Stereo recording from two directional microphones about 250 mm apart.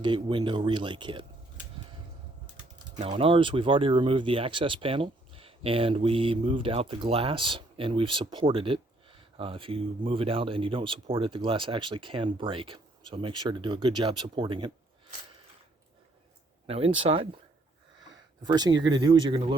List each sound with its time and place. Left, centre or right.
0.0 s speech: centre
3.0 s speech: right
16.6 s speech: right